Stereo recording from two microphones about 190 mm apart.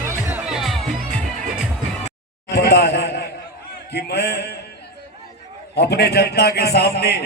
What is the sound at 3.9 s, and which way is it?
Speech, 55° left (ahead or behind).